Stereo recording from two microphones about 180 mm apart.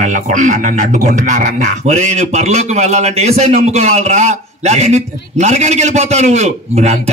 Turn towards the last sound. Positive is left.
turn(degrees=-40)  # may be behind; listen again after turning